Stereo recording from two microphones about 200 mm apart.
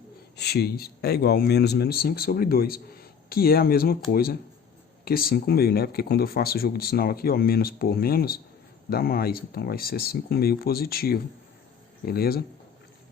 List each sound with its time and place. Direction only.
0.3 s speech: 55° left (ahead or behind)